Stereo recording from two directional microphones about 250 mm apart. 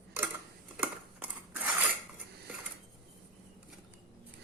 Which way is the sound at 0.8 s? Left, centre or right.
Centre.